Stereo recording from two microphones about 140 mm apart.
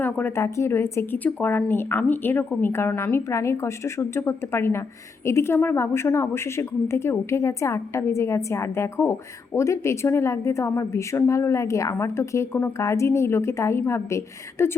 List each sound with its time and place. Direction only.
0.0 s a woman's voice: 15° left (ahead or behind)